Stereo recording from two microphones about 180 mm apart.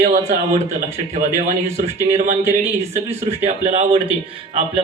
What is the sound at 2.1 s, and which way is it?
Speech, 45° right (ahead or behind).